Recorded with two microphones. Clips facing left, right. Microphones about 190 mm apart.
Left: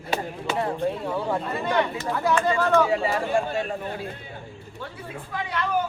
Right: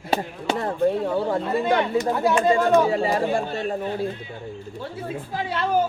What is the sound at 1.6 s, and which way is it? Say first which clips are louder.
Speech: right 2 dB; 20° right (ahead or behind).